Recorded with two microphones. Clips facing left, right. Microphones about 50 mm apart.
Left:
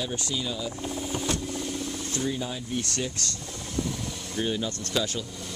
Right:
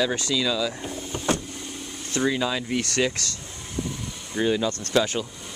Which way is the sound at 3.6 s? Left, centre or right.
Centre.